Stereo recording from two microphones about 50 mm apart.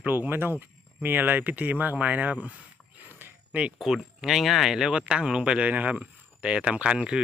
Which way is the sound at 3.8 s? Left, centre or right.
Centre.